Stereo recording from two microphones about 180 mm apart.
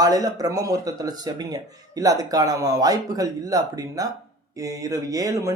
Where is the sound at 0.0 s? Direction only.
20° right (ahead or behind).